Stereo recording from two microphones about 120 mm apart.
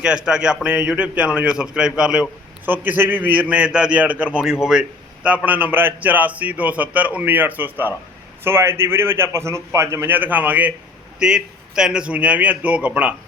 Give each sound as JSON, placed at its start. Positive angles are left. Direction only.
{"t": 0.0, "sound": "a man's voice", "side_deg": -5}